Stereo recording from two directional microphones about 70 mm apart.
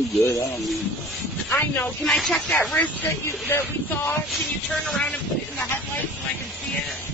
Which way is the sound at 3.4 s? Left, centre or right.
Left.